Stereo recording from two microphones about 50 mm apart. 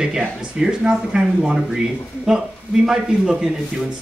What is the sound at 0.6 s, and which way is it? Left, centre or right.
Speech, centre.